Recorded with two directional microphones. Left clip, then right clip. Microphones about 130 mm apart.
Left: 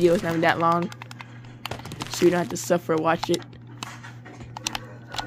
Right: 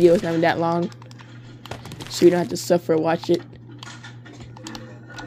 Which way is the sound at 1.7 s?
Centre (ahead or behind).